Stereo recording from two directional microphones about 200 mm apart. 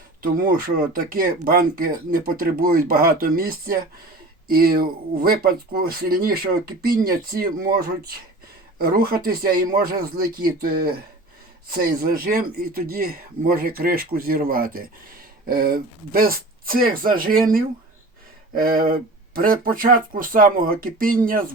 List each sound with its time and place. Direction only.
0.2 s speech: 45° right (ahead or behind)
8.8 s speech: 50° right (ahead or behind)